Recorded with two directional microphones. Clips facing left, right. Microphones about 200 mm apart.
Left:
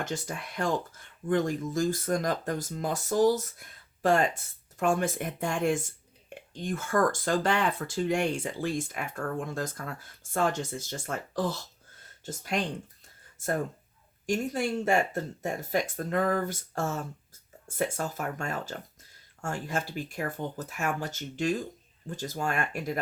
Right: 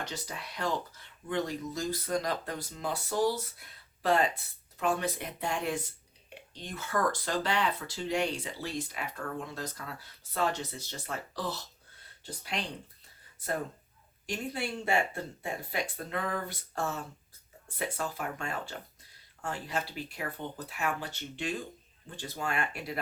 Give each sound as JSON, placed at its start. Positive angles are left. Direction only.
{"t": 0.0, "sound": "speech", "side_deg": 50}
{"t": 14.3, "sound": "speech", "side_deg": 45}